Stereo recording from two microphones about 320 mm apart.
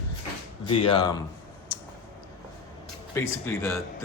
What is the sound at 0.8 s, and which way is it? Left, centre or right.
Speech, centre.